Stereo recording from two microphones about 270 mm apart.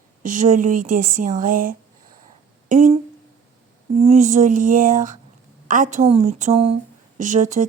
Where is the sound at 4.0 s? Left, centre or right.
Right.